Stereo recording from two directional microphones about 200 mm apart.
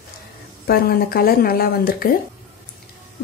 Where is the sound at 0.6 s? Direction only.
50° left (ahead or behind).